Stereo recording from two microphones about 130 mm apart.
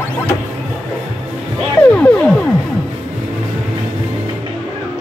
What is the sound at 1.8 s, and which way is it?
Music, 10° left (ahead or behind).